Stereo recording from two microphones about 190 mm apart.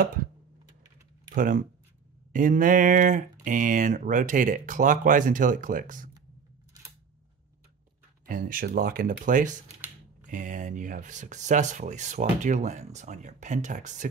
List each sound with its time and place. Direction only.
1.3 s speech: 45° right (ahead or behind)
8.3 s speech: 45° right (ahead or behind)